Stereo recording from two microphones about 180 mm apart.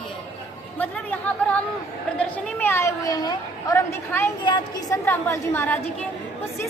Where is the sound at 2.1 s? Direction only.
10° left (ahead or behind).